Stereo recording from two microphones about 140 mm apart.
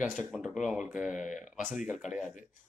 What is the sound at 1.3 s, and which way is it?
Speech, 65° left (ahead or behind).